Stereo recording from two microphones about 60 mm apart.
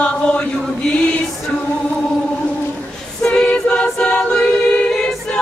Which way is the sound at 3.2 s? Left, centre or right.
Centre.